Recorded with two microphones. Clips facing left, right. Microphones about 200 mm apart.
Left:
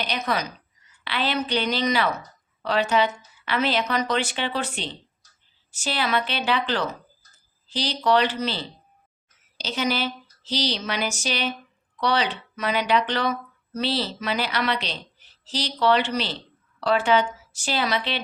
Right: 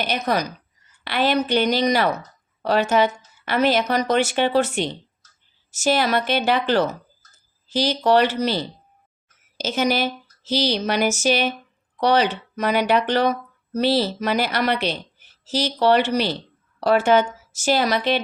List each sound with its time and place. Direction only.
0.1 s a woman's voice: 45° right (ahead or behind)
9.6 s a woman's voice: 45° right (ahead or behind)